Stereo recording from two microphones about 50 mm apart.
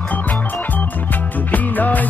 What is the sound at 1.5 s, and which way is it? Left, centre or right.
Music, left.